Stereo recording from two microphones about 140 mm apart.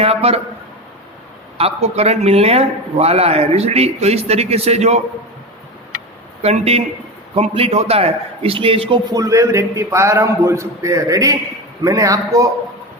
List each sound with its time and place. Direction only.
0.0 s a man's voice: 45° right (ahead or behind)
1.5 s a man's voice: 45° right (ahead or behind)
6.4 s a man's voice: 50° right (ahead or behind)
9.1 s a man's voice: 25° right (ahead or behind)